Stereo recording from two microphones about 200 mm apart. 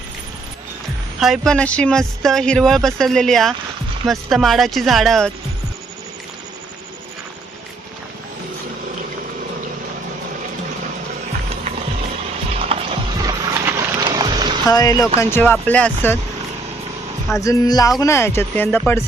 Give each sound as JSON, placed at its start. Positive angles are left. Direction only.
{"t": 1.2, "sound": "speech", "side_deg": 0}
{"t": 12.7, "sound": "music", "side_deg": -30}
{"t": 13.2, "sound": "music", "side_deg": -15}
{"t": 14.7, "sound": "speech", "side_deg": 20}
{"t": 17.3, "sound": "speech", "side_deg": 15}